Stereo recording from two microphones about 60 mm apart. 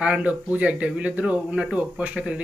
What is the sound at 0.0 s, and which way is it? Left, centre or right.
Speech, right.